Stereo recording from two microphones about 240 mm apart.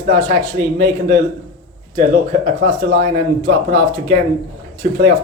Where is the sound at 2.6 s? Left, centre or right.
Right.